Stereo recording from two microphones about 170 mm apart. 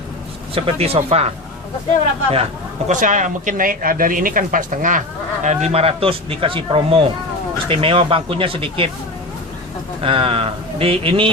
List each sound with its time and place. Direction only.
0.5 s speech: 35° right (ahead or behind)
2.3 s a man's voice: 40° right (ahead or behind)
10.0 s speech: 35° right (ahead or behind)